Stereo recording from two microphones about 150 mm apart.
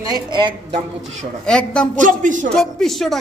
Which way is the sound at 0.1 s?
30° right (ahead or behind).